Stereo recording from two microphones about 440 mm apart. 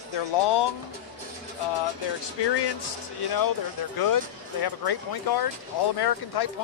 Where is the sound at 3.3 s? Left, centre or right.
Left.